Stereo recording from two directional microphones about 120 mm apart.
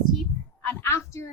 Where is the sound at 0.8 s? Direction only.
25° left (ahead or behind).